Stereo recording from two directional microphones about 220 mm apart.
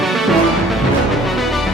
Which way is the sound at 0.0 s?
Centre (ahead or behind).